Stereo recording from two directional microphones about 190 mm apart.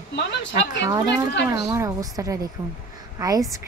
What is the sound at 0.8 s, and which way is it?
A woman's voice, 20° right (ahead or behind).